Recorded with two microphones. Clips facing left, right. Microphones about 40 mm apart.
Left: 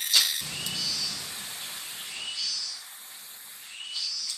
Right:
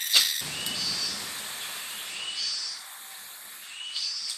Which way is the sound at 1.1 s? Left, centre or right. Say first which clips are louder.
Right 2 dB; right.